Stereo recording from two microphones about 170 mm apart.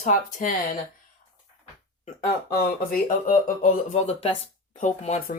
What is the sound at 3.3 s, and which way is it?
Speech, 50° left (ahead or behind).